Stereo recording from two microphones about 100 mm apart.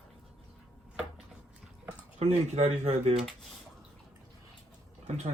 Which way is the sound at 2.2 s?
90° right.